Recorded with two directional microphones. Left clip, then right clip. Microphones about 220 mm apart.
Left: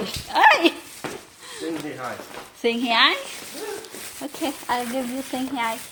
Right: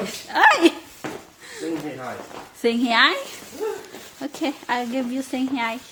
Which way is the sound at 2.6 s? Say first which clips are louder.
Right 1 dB; 20° right (ahead or behind).